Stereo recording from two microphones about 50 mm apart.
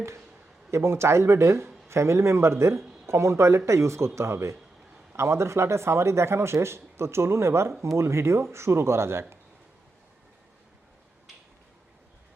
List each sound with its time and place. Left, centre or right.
0.7 s speech: right